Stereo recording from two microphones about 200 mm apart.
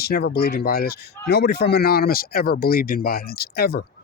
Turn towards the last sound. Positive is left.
turn(degrees=50)  # may be behind; listen again after turning